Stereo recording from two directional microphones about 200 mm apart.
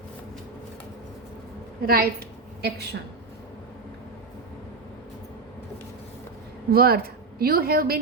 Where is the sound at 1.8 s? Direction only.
50° right (ahead or behind).